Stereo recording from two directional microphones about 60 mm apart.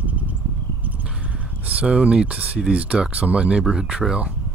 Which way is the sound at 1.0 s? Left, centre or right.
Centre.